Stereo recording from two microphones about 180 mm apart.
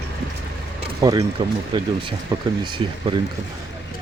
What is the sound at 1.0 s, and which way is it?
Speech, 20° right (ahead or behind).